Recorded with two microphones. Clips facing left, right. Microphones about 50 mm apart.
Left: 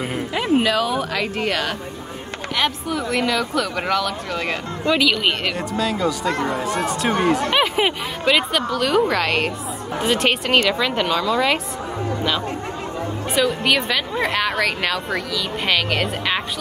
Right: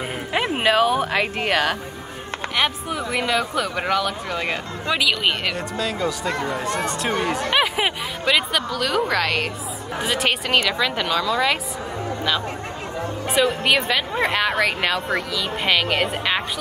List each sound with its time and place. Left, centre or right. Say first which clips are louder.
0.3 s speech: left 1 dB; right
2.5 s a woman's voice: left 1 dB; centre
13.4 s speech: even; centre